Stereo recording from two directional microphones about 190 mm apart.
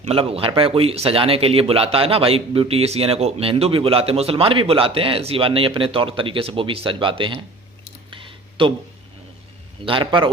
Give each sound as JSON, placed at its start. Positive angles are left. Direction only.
{"t": 0.1, "sound": "speech", "side_deg": -30}
{"t": 8.1, "sound": "a sound", "side_deg": -25}
{"t": 9.8, "sound": "speech", "side_deg": -25}